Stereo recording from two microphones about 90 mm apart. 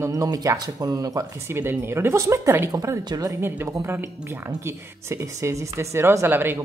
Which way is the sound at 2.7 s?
40° right (ahead or behind).